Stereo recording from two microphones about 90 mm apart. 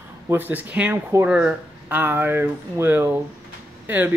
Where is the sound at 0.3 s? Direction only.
20° right (ahead or behind).